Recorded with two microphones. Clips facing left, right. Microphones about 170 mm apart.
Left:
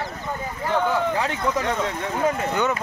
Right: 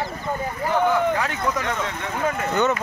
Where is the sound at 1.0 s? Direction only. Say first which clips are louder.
Right 1 dB; 25° left (ahead or behind).